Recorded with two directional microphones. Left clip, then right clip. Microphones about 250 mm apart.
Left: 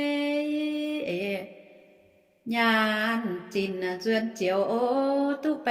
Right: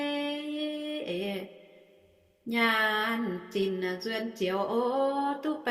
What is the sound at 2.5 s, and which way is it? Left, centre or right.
Speech, left.